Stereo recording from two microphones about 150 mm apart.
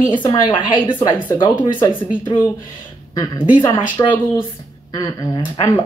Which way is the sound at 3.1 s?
30° left (ahead or behind).